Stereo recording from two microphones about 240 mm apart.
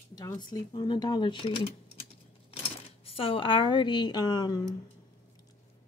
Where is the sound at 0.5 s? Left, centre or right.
Centre.